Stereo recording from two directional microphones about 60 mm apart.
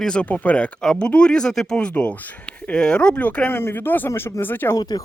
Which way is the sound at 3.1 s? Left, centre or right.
Left.